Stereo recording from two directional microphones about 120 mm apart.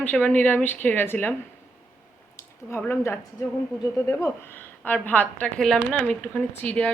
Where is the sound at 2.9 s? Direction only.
20° left (ahead or behind).